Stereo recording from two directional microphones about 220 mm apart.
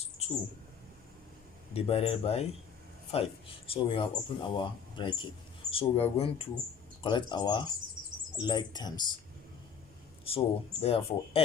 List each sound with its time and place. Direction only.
0.2 s bird: 30° left (ahead or behind)
1.7 s speech: 25° left (ahead or behind)
3.7 s speech: 25° left (ahead or behind)
10.2 s speech: 25° left (ahead or behind)